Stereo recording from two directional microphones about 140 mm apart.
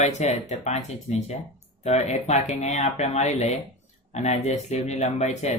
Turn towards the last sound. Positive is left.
turn(degrees=55)  # may be behind; listen again after turning